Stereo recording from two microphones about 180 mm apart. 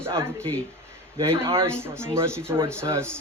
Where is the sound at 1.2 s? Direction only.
25° right (ahead or behind).